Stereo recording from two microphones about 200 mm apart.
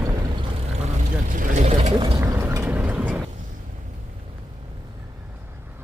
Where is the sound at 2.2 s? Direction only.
15° right (ahead or behind).